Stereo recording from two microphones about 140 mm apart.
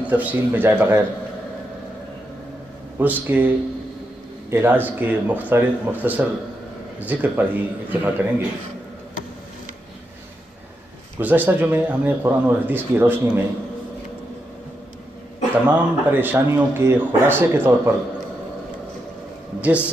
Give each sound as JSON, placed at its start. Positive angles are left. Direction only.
{"t": 0.0, "sound": "speech", "side_deg": -10}
{"t": 3.0, "sound": "speech", "side_deg": -10}
{"t": 11.1, "sound": "speech", "side_deg": -15}
{"t": 15.5, "sound": "speech", "side_deg": -15}